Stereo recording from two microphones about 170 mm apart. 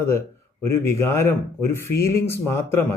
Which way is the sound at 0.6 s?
15° left (ahead or behind).